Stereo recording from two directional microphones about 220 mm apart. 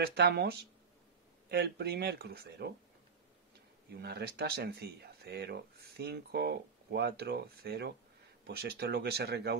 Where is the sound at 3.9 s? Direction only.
50° right (ahead or behind).